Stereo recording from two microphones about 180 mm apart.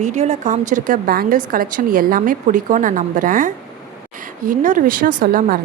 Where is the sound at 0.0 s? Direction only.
40° right (ahead or behind).